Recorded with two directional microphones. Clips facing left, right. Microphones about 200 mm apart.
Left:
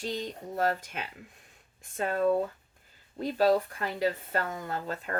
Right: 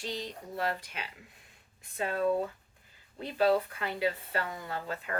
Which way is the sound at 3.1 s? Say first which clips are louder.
Left 2 dB; 40° left (ahead or behind).